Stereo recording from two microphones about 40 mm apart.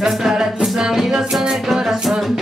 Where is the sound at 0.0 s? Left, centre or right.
Centre.